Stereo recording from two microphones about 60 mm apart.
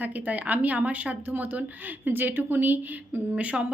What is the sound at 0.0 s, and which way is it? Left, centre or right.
A woman's voice, right.